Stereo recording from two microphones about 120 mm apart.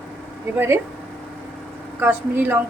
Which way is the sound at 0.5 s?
20° right (ahead or behind).